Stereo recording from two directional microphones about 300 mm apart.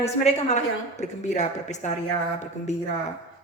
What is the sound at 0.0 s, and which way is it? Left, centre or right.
A woman's voice, left.